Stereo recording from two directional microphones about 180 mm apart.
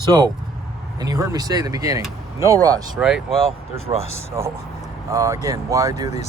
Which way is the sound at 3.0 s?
5° right (ahead or behind).